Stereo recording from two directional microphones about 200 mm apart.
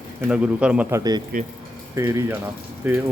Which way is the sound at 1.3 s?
45° right (ahead or behind).